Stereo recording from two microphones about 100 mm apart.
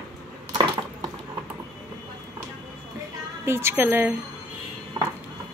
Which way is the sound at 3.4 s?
25° right (ahead or behind).